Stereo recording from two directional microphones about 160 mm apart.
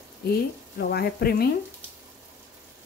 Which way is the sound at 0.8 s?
75° left (ahead or behind).